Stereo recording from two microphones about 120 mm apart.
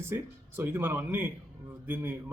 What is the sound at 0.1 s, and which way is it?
A man's voice, 20° right (ahead or behind).